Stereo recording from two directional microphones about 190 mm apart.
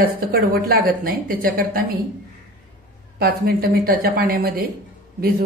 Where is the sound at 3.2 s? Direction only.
50° right (ahead or behind).